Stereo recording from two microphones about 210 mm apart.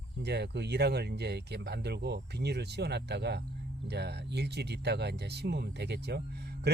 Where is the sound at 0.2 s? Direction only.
55° right (ahead or behind).